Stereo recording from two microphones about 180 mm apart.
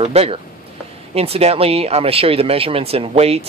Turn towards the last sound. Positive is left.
turn(degrees=-35)  # may be behind; listen again after turning